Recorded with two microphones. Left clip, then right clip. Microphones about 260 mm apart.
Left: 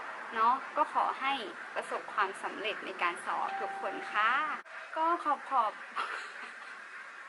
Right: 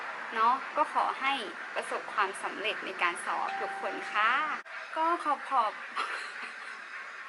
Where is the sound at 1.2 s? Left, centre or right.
Centre.